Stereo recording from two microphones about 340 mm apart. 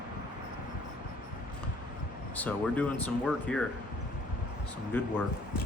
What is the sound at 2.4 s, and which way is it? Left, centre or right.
Speech, centre.